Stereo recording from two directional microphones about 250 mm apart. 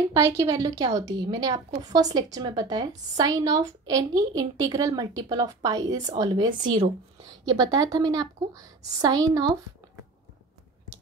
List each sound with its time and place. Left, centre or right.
0.1 s a woman's voice: centre